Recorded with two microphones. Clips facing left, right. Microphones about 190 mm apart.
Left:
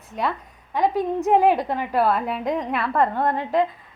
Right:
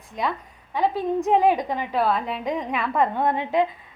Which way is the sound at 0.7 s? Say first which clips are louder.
Left 1 dB; 10° left (ahead or behind).